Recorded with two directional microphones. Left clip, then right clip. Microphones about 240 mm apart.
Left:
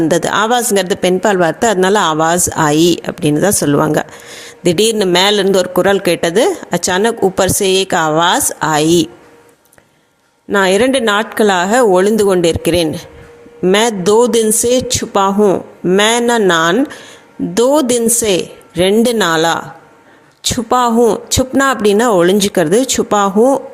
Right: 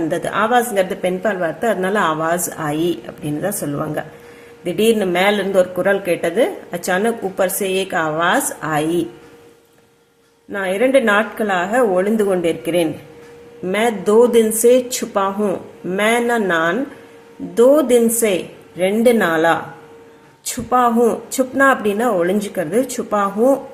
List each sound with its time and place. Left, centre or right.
0.1 s speech: left
10.5 s speech: left
20.7 s speech: left